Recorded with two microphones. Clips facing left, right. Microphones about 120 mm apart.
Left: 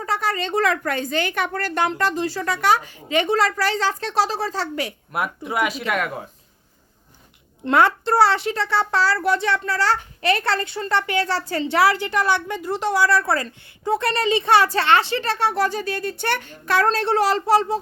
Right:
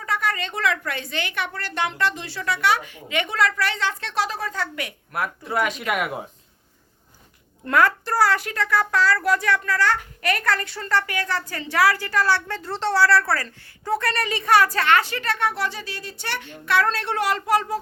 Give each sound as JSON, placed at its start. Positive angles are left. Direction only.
{"t": 0.0, "sound": "a woman's voice", "side_deg": 35}
{"t": 5.1, "sound": "speech", "side_deg": 15}
{"t": 5.8, "sound": "speech", "side_deg": -5}
{"t": 7.6, "sound": "a child's voice", "side_deg": 25}